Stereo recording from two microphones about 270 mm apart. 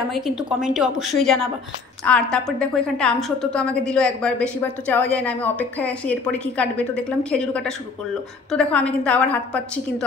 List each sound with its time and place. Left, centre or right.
0.1 s a woman's voice: centre